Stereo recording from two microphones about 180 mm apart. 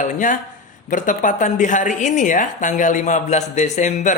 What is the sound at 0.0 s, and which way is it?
A woman's voice, 45° left (ahead or behind).